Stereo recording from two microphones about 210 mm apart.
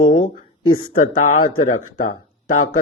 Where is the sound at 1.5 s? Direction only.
85° left.